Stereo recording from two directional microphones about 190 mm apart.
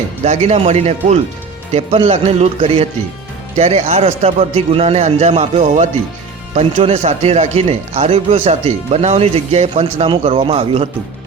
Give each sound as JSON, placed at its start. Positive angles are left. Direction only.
{"t": 0.3, "sound": "speech", "side_deg": -35}